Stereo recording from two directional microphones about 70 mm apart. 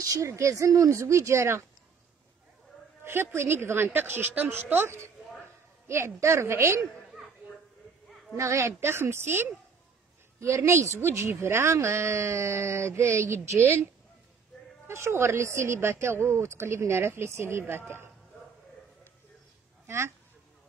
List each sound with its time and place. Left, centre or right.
0.0 s speech: right
3.0 s a woman's voice: right
8.4 s a woman's voice: right
14.9 s a woman's voice: right